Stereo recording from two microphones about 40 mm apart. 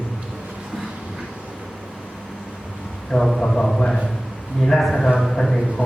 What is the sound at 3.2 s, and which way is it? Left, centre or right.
Speech, centre.